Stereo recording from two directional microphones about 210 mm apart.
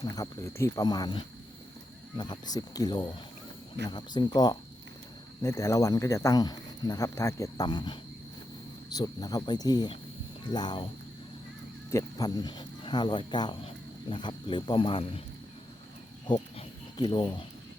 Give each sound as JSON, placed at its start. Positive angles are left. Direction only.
{"t": 0.0, "sound": "speech", "side_deg": 20}
{"t": 9.0, "sound": "speech", "side_deg": 20}
{"t": 11.9, "sound": "speech", "side_deg": 15}
{"t": 16.2, "sound": "a sound", "side_deg": 20}